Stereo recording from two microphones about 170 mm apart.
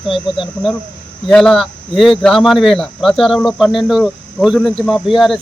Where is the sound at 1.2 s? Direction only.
5° left (ahead or behind).